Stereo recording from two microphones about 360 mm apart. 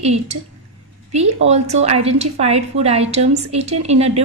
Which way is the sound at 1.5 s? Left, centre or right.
Centre.